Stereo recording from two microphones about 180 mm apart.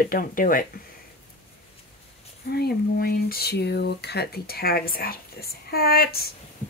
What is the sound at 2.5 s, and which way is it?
Speech, 60° left (ahead or behind).